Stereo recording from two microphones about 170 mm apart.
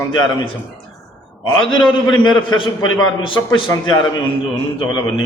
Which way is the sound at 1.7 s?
25° left (ahead or behind).